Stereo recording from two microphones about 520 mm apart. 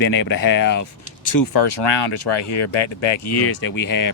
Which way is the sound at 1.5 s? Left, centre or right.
Left.